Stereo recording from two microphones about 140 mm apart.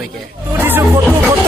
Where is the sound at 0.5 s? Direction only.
15° right (ahead or behind).